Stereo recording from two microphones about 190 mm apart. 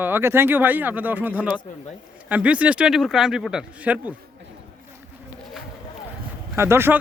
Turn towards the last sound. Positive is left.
turn(degrees=-10)  # may be behind; listen again after turning